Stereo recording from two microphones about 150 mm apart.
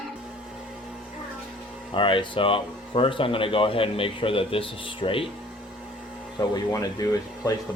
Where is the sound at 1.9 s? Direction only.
35° left (ahead or behind).